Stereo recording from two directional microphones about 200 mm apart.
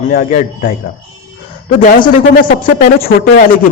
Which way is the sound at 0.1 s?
40° left (ahead or behind).